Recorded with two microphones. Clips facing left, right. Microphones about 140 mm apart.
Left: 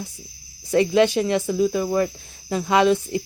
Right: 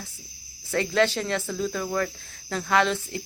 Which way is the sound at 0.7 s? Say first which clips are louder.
Left 6 dB; 15° left (ahead or behind).